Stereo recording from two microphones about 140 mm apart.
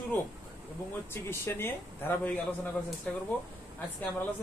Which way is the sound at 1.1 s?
15° left (ahead or behind).